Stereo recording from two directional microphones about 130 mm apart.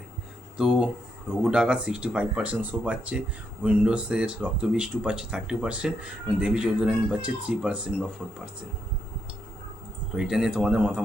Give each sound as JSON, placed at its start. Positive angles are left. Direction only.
{"t": 0.5, "sound": "speech", "side_deg": -5}
{"t": 10.2, "sound": "speech", "side_deg": -5}